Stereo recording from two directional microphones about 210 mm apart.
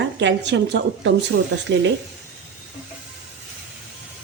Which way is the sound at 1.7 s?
55° right (ahead or behind).